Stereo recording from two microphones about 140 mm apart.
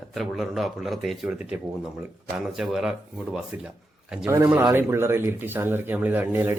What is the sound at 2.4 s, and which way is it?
Speech, 5° right (ahead or behind).